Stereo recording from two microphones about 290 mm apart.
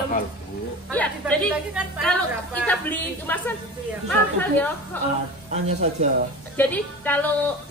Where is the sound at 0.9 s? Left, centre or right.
Centre.